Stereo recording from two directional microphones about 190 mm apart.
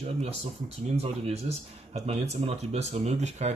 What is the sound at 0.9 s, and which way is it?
Speech, 35° right (ahead or behind).